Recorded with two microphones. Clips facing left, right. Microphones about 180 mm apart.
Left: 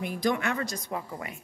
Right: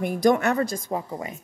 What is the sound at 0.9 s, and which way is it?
Speech, 25° right (ahead or behind).